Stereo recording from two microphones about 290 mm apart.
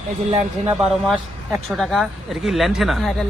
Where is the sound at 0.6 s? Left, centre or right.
Centre.